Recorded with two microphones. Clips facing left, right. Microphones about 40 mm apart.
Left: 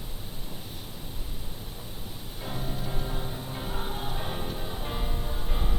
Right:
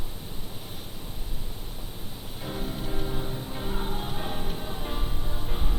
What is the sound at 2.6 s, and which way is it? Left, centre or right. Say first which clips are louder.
Music: right 1 dB; right.